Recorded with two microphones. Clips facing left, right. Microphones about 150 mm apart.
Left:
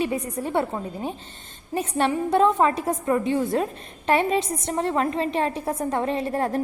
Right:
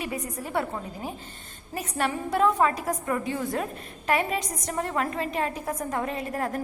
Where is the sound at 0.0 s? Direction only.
30° left (ahead or behind).